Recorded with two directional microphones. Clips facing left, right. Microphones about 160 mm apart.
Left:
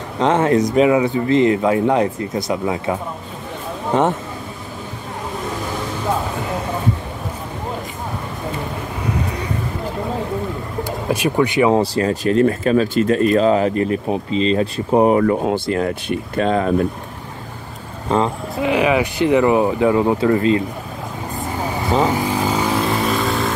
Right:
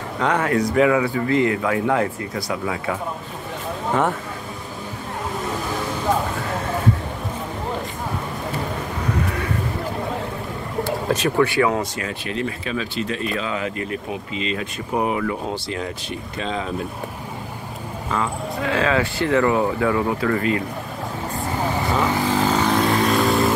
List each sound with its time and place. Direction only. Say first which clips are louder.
0.2 s speech: left 5 dB; 25° left (ahead or behind)
10.8 s vehicle: left 1 dB; 15° left (ahead or behind)
11.7 s speech: left 9 dB; 30° left (ahead or behind)
15.4 s speech: left 8 dB; 55° left (ahead or behind)
18.0 s speech: left 7 dB; 30° left (ahead or behind)
18.6 s speech: left 4 dB; 15° left (ahead or behind)
22.1 s vehicle: even; 15° left (ahead or behind)